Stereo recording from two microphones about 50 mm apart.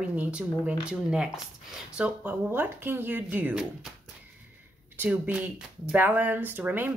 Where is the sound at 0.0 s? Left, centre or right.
Right.